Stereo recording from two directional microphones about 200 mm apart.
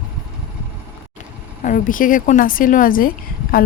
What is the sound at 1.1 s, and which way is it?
Speech, 40° left (ahead or behind).